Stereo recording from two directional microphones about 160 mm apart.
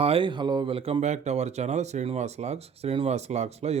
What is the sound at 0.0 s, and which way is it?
Speech, 35° right (ahead or behind).